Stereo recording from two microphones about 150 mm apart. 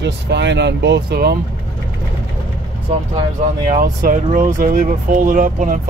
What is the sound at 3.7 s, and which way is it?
Speech, 60° right (ahead or behind).